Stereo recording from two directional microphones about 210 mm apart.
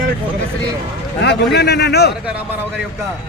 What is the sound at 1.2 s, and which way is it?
Speech, 55° left (ahead or behind).